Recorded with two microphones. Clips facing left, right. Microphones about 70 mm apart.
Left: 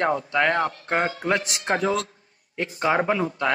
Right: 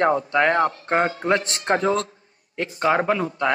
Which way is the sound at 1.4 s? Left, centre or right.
Centre.